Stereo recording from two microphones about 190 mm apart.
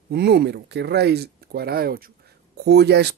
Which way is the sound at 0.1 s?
60° right (ahead or behind).